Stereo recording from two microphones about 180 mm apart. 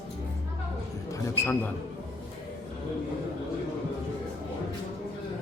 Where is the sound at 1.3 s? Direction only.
15° left (ahead or behind).